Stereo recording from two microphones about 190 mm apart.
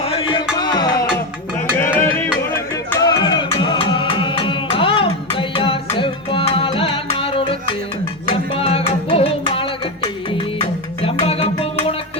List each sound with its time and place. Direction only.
0.0 s music: 30° left (ahead or behind)
1.1 s a sound: 10° left (ahead or behind)
2.2 s music: 10° left (ahead or behind); by 11.9 s 30° left (ahead or behind)